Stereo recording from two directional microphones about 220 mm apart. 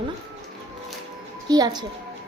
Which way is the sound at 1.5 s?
20° right (ahead or behind).